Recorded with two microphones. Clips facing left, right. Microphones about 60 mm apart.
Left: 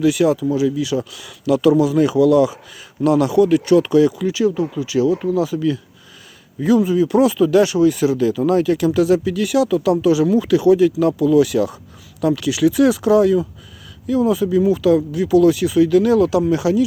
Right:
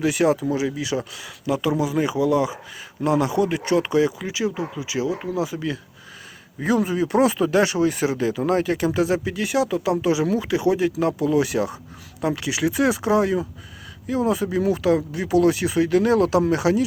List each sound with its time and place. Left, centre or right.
0.0 s speech: right